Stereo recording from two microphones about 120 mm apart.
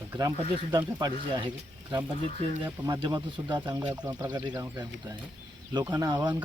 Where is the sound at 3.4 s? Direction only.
30° right (ahead or behind).